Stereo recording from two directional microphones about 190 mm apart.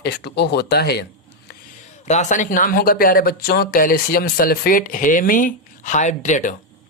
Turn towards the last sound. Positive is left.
turn(degrees=40)  # may be behind; listen again after turning